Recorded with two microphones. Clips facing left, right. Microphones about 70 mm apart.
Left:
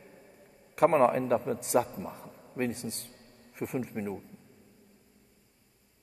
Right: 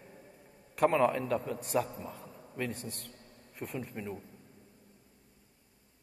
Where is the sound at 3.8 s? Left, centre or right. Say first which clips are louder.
Left 5 dB; left.